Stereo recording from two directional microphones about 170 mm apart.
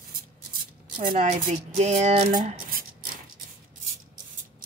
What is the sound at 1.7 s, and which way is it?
Speech, 45° right (ahead or behind).